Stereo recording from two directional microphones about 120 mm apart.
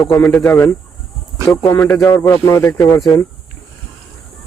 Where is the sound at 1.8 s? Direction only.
5° left (ahead or behind).